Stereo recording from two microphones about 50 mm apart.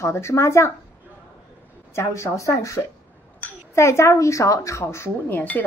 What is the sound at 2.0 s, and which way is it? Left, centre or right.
Speech, left.